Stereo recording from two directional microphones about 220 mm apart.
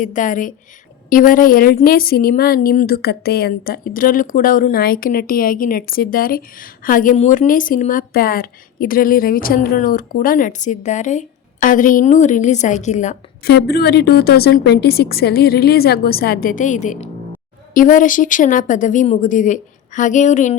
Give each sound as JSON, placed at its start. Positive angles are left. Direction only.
{"t": 0.0, "sound": "a woman's voice", "side_deg": 35}
{"t": 13.5, "sound": "a woman's voice", "side_deg": 45}